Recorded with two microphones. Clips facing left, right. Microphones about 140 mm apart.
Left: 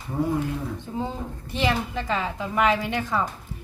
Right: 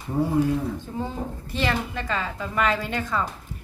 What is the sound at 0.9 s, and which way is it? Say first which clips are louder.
A woman's voice: even; 10° left (ahead or behind).